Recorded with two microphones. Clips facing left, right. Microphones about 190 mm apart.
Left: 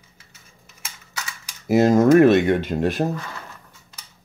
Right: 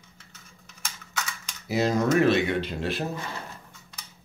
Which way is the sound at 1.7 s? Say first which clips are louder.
Left 9 dB; 50° left (ahead or behind).